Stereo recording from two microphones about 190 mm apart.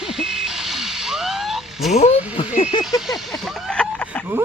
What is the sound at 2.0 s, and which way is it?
Speech, 35° left (ahead or behind).